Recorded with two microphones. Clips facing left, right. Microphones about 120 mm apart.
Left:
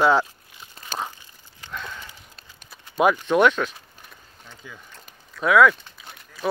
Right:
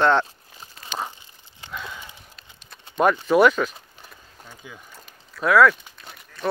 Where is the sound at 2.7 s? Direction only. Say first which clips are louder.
Even; 5° left (ahead or behind).